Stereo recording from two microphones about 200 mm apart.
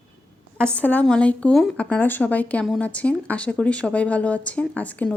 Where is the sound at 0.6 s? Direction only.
5° left (ahead or behind).